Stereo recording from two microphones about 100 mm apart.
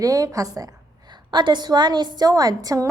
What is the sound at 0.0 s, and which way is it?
Speech, 35° right (ahead or behind).